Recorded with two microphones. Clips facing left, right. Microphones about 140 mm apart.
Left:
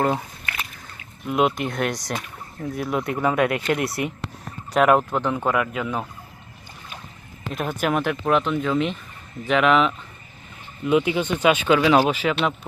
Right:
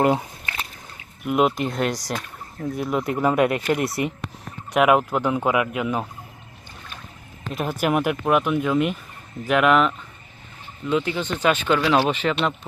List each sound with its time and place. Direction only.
0.0 s a sound: 15° right (ahead or behind)
1.2 s speech: 5° right (ahead or behind)
7.5 s speech: 5° right (ahead or behind)
10.8 s speech: 15° left (ahead or behind)